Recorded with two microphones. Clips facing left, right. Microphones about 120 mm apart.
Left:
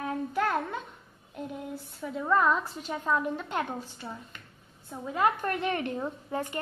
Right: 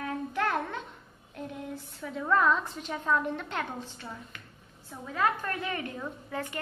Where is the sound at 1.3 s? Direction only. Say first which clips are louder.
Left 1 dB; 10° left (ahead or behind).